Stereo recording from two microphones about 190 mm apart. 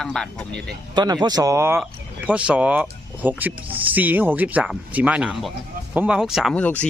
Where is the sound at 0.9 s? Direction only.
20° right (ahead or behind).